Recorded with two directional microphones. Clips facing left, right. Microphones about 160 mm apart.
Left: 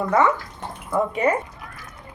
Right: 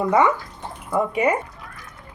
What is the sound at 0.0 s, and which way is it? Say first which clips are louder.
Speech: right 1 dB; 15° right (ahead or behind).